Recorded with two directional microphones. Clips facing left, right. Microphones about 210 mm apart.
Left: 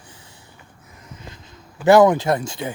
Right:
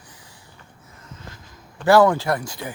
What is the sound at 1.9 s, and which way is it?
Speech, 20° left (ahead or behind).